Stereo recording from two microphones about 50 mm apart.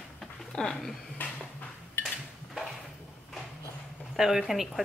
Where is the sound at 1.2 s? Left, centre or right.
Left.